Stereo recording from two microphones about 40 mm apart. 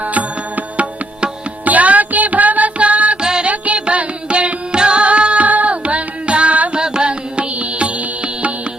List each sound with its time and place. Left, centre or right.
0.0 s music: right
3.2 s music: centre
3.5 s music: right
5.8 s carnatic music: right
6.7 s carnatic music: right
7.6 s music: right